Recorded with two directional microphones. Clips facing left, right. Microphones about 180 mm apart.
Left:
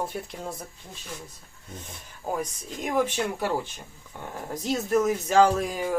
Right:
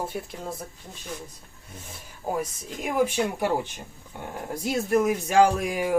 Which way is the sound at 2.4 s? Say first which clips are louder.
Right 1 dB; 10° right (ahead or behind).